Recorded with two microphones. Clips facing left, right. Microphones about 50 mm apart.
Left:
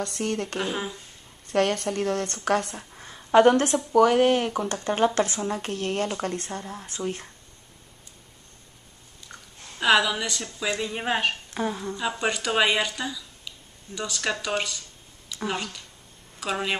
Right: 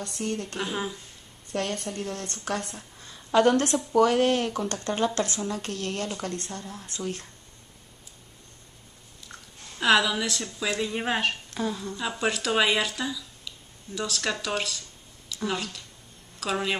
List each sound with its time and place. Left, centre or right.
0.0 s a woman's voice: left
0.6 s speech: centre
1.5 s a woman's voice: left
2.8 s a sound: left
3.3 s speech: left
9.3 s speech: centre
11.5 s speech: left
11.9 s speech: centre